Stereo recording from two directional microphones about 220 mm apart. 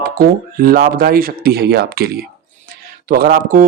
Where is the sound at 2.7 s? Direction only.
40° right (ahead or behind).